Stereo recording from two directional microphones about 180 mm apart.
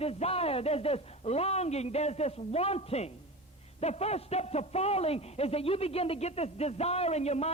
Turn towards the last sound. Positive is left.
turn(degrees=35)  # may be behind; listen again after turning